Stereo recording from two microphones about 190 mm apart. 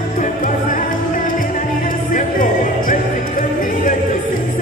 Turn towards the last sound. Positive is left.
turn(degrees=45)  # may be behind; listen again after turning